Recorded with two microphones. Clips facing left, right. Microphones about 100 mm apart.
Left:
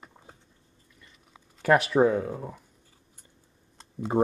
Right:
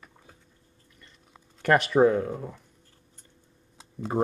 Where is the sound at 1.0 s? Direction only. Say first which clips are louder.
Even; 5° left (ahead or behind).